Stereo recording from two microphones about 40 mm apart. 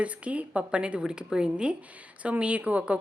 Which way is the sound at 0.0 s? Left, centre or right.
Right.